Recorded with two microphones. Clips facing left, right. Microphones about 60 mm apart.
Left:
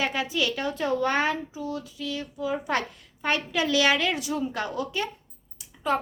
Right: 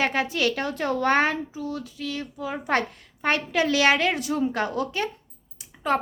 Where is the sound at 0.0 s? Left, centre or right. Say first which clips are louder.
Right 3 dB; right.